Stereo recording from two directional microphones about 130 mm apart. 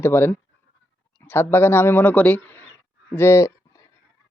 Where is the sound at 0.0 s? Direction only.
15° left (ahead or behind).